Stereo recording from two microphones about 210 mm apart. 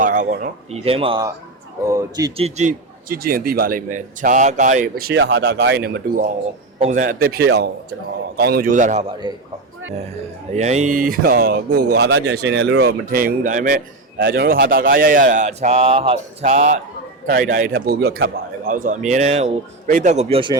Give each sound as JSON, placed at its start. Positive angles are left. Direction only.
{"t": 0.0, "sound": "a man's voice", "side_deg": -40}
{"t": 1.8, "sound": "a man's voice", "side_deg": -15}
{"t": 9.2, "sound": "speech", "side_deg": -20}
{"t": 10.5, "sound": "a man's voice", "side_deg": -35}
{"t": 11.7, "sound": "speech", "side_deg": -90}
{"t": 11.9, "sound": "a man's voice", "side_deg": -55}
{"t": 20.3, "sound": "speech", "side_deg": -25}